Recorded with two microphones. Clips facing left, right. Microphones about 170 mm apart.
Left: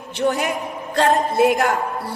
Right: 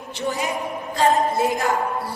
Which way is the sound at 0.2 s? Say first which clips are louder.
Left 4 dB; 60° left (ahead or behind).